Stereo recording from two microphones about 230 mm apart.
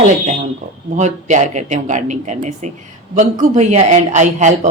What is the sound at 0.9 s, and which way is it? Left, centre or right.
A man's voice, right.